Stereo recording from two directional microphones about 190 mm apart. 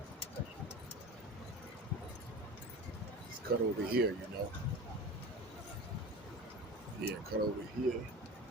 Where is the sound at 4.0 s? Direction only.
60° right (ahead or behind).